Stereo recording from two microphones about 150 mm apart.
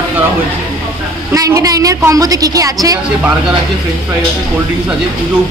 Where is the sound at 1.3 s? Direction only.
20° right (ahead or behind).